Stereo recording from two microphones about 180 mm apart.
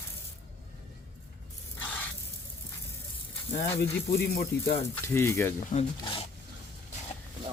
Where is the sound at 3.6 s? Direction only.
60° left (ahead or behind).